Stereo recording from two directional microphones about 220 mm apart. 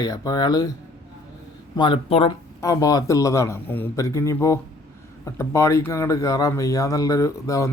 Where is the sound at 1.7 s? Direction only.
20° left (ahead or behind).